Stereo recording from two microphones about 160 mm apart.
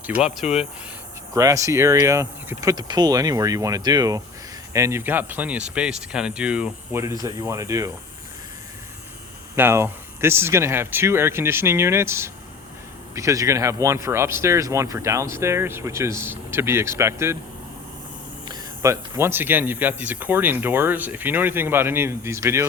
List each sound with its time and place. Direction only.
0.4 s speech: 45° left (ahead or behind)
1.3 s speech: 20° right (ahead or behind)
7.0 s speech: 20° right (ahead or behind)
9.6 s speech: 15° right (ahead or behind)
18.4 s speech: 20° right (ahead or behind)